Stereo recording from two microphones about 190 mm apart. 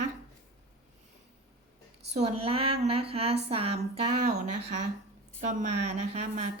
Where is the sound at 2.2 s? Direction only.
30° right (ahead or behind).